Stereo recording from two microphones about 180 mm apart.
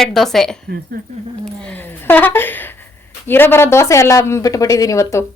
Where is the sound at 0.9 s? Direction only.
55° right (ahead or behind).